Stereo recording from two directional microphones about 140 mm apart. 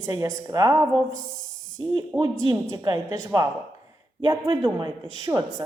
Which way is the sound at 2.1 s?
15° right (ahead or behind).